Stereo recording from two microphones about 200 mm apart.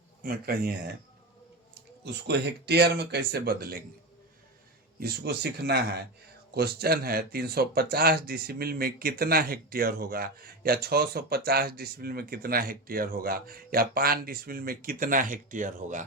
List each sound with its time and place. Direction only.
0.2 s speech: 50° right (ahead or behind)
2.2 s speech: 55° right (ahead or behind)
4.9 s speech: 50° right (ahead or behind)